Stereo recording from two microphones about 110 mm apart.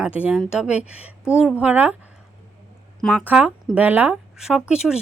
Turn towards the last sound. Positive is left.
turn(degrees=-5)  # may be behind; listen again after turning